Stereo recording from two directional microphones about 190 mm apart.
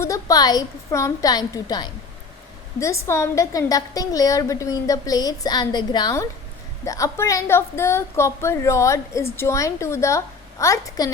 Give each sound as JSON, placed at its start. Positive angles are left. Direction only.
{"t": 0.0, "sound": "a woman's voice", "side_deg": 20}